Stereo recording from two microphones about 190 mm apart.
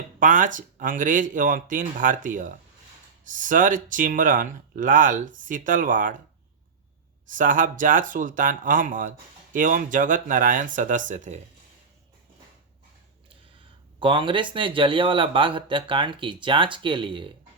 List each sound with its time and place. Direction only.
0.2 s speech: 45° right (ahead or behind)
7.3 s speech: 45° right (ahead or behind)
14.0 s speech: 25° right (ahead or behind)